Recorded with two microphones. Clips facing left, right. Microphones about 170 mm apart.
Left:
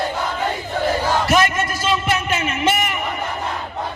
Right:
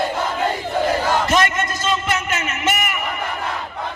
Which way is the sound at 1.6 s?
10° left (ahead or behind).